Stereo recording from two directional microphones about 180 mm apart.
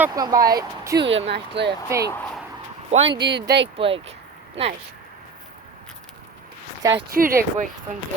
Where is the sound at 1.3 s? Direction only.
70° right (ahead or behind).